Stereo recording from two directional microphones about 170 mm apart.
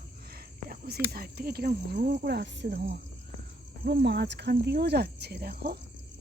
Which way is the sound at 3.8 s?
75° right (ahead or behind).